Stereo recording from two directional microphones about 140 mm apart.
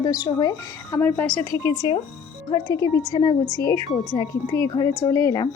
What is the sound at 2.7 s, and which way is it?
A woman's voice, 20° left (ahead or behind).